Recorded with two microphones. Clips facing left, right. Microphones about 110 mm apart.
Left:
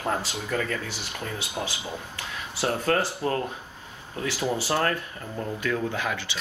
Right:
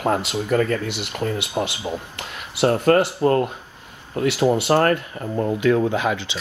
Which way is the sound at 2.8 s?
55° right (ahead or behind).